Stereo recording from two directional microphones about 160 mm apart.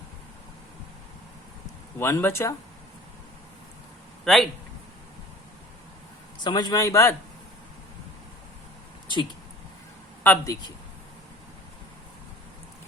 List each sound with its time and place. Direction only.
2.0 s speech: 15° left (ahead or behind)
4.2 s a man's voice: centre (ahead or behind)
6.4 s speech: 25° left (ahead or behind)
10.2 s speech: 20° left (ahead or behind)